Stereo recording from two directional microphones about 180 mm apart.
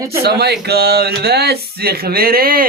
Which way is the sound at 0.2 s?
60° right (ahead or behind).